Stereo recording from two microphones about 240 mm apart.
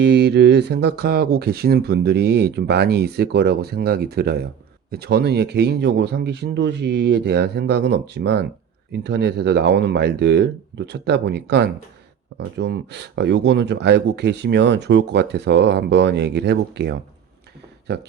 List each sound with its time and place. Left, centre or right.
0.0 s speech: right